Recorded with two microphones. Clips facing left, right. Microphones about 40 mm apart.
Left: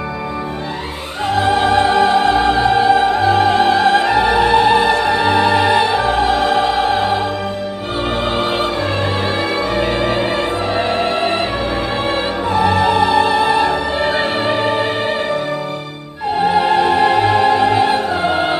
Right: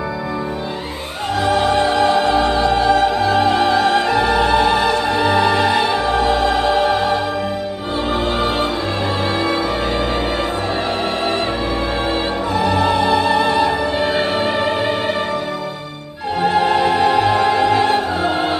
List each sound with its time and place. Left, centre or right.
1.3 s opera: left
12.5 s music: centre
16.3 s music: centre